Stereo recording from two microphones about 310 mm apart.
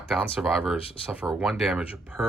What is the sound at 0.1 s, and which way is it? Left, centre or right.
Speech, centre.